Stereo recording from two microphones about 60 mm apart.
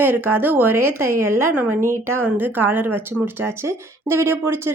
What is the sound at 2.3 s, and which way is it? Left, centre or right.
Speech, right.